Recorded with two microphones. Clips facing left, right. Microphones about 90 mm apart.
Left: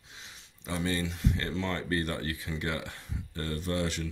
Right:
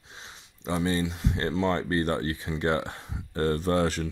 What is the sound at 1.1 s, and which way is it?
Speech, 30° right (ahead or behind).